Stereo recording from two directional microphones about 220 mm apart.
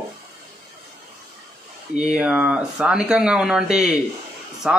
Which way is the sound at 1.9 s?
5° right (ahead or behind).